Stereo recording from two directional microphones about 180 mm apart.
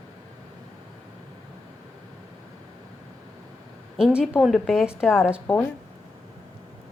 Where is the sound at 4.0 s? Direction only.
5° right (ahead or behind).